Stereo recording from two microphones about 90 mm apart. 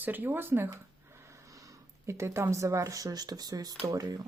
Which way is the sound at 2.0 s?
30° right (ahead or behind).